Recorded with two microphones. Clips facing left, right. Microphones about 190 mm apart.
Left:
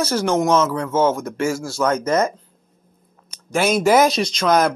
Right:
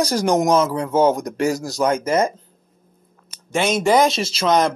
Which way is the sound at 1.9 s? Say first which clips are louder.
Even; 30° right (ahead or behind).